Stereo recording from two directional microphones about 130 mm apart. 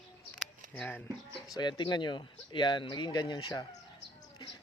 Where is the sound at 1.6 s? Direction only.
35° left (ahead or behind).